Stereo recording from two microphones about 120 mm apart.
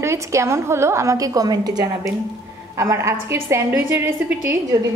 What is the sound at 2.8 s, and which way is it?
A woman's voice, 25° right (ahead or behind).